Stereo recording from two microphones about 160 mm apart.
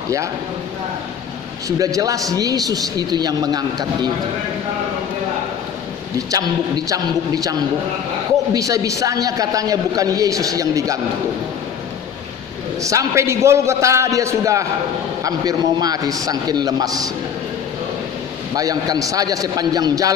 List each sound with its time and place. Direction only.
1.8 s a man's voice: 20° right (ahead or behind)
6.9 s a man's voice: 20° right (ahead or behind)
8.5 s a man's voice: 20° right (ahead or behind)
12.8 s a man's voice: 20° right (ahead or behind)
18.6 s a man's voice: 20° right (ahead or behind)